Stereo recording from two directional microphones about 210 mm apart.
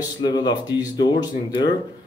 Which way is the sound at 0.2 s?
20° left (ahead or behind).